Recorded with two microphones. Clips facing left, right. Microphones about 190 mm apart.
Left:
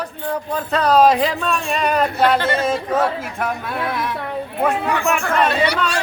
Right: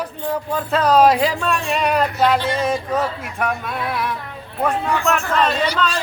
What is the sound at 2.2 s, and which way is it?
Speech, 60° left (ahead or behind).